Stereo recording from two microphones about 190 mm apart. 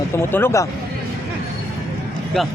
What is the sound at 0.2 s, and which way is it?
Speech, 10° left (ahead or behind).